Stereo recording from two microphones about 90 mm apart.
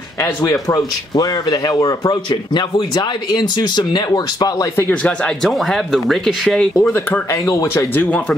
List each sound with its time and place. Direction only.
0.5 s speech: 40° left (ahead or behind)
3.3 s speech: 55° left (ahead or behind)
4.7 s speech: 20° left (ahead or behind)
5.4 s speech: 5° left (ahead or behind)
6.9 s speech: 30° left (ahead or behind)